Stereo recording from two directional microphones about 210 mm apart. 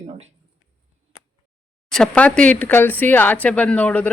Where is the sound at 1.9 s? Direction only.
5° left (ahead or behind).